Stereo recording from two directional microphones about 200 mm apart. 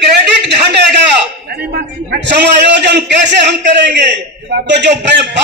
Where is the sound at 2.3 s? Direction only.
60° right (ahead or behind).